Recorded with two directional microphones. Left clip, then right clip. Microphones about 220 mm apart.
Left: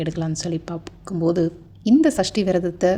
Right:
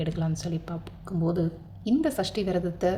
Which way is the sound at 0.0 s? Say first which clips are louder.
Left 6 dB; 30° left (ahead or behind).